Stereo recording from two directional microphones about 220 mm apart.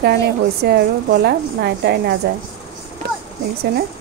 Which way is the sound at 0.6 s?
50° right (ahead or behind).